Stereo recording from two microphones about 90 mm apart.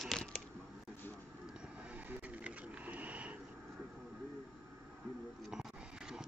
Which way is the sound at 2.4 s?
15° right (ahead or behind).